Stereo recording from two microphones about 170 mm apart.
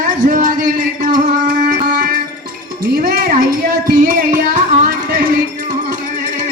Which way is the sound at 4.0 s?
50° right (ahead or behind).